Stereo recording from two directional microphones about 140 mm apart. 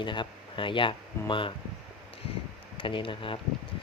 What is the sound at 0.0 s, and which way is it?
Speech, 35° left (ahead or behind).